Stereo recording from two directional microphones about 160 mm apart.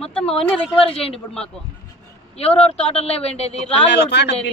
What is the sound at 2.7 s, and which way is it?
Speech, 40° left (ahead or behind).